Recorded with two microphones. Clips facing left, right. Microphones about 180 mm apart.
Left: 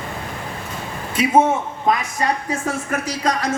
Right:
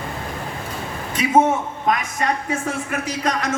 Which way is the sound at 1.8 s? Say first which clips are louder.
Left 2 dB; 30° left (ahead or behind).